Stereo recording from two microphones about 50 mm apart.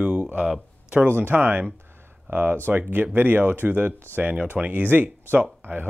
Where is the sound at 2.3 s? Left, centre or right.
Right.